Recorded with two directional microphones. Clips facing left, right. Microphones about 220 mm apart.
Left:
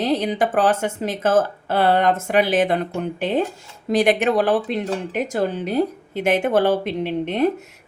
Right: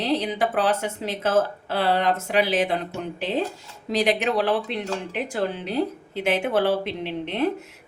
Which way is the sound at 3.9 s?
50° left (ahead or behind).